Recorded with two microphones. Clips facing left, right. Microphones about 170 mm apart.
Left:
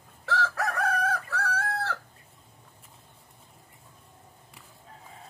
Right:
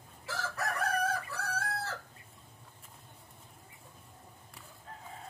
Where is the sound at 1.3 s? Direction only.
75° left (ahead or behind).